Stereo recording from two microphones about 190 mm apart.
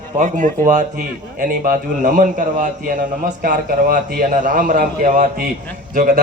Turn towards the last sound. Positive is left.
turn(degrees=-45)  # may be behind; listen again after turning